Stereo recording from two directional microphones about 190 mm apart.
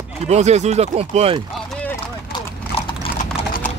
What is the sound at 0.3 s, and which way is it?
Speech, 35° right (ahead or behind).